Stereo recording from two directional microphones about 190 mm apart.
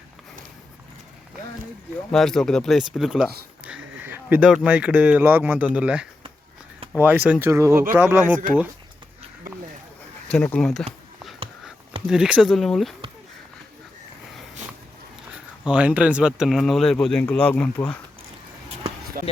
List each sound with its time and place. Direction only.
2.1 s speech: centre (ahead or behind)
10.2 s speech: 5° left (ahead or behind)
12.0 s speech: 5° right (ahead or behind)
15.3 s speech: 5° right (ahead or behind)
19.2 s speech: 50° right (ahead or behind)